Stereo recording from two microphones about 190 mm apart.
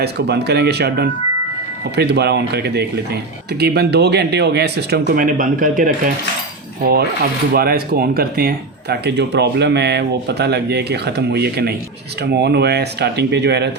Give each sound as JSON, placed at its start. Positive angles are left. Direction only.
{"t": 0.0, "sound": "speech", "side_deg": -60}
{"t": 5.0, "sound": "speech", "side_deg": -45}
{"t": 6.8, "sound": "speech", "side_deg": -55}